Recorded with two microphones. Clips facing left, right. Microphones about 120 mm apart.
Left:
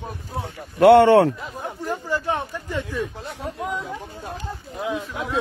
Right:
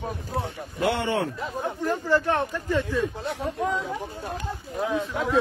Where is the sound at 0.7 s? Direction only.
65° left (ahead or behind).